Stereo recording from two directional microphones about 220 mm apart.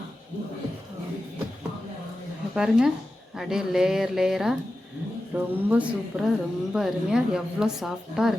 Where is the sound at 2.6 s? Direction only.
Centre (ahead or behind).